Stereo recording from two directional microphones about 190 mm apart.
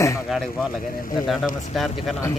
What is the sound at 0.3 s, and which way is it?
Speech, centre (ahead or behind).